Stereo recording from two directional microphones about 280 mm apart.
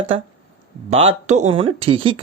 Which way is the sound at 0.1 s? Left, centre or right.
Right.